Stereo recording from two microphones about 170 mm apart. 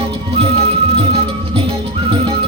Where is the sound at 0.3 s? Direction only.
35° right (ahead or behind).